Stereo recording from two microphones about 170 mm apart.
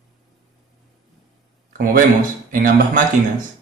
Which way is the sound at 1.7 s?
55° right (ahead or behind).